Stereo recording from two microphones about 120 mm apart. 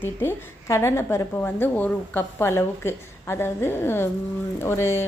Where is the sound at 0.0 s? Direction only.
20° left (ahead or behind).